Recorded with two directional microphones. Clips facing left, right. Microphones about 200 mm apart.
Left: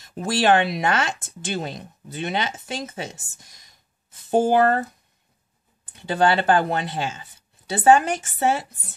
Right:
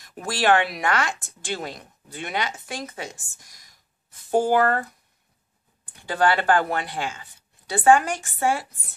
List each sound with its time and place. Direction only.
0.0 s speech: 25° left (ahead or behind)
5.9 s speech: 25° left (ahead or behind)